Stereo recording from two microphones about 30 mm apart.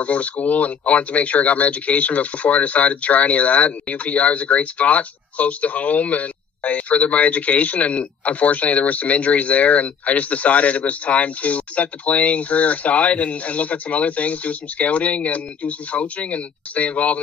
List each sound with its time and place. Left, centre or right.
0.0 s speech: left